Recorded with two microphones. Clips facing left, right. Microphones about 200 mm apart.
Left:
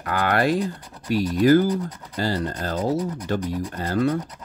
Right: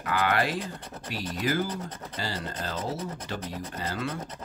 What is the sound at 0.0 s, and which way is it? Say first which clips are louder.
Speech: left 5 dB; 45° left (ahead or behind).